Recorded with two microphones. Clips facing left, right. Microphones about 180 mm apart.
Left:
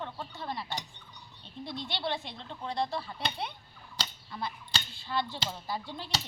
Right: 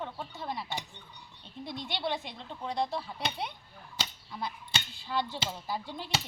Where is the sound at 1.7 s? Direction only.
50° right (ahead or behind).